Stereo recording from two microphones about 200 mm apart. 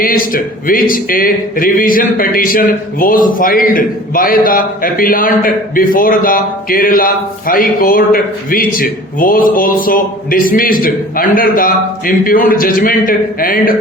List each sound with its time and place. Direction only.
0.0 s speech: 45° left (ahead or behind)